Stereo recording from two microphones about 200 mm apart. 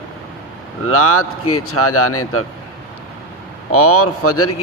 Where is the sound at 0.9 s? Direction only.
90° left.